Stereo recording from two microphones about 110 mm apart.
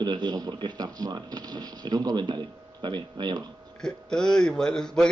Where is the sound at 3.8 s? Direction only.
5° left (ahead or behind).